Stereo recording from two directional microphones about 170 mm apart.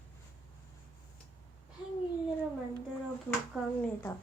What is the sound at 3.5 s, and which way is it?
Speech, 5° right (ahead or behind).